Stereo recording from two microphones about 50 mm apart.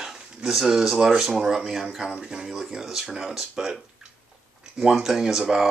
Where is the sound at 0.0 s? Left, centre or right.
Centre.